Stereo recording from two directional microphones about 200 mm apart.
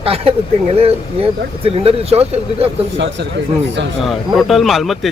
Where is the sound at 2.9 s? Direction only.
55° right (ahead or behind).